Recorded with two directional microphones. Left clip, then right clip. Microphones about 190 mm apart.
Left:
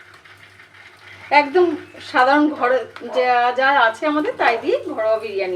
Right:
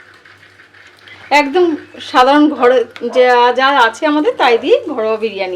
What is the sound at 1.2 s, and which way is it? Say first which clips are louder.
A woman's voice: right 4 dB; 40° right (ahead or behind).